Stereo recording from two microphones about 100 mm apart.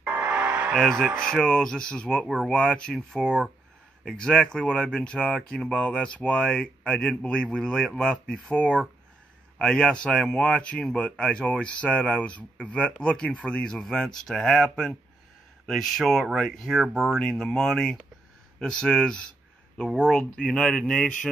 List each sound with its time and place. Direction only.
0.1 s music: 20° right (ahead or behind)
0.7 s speech: 5° left (ahead or behind)